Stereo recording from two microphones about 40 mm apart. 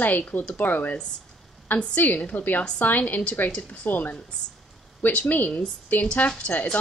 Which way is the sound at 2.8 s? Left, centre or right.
Left.